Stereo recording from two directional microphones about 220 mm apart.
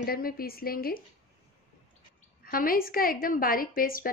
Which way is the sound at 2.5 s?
40° left (ahead or behind).